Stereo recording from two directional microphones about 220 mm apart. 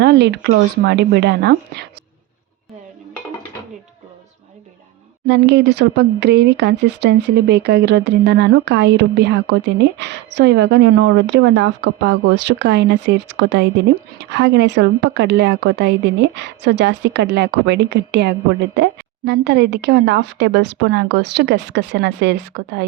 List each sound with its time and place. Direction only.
0.0 s speech: 50° right (ahead or behind)
5.3 s speech: 50° right (ahead or behind)